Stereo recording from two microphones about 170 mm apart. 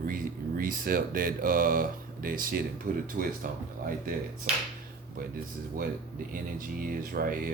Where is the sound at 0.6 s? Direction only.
55° right (ahead or behind).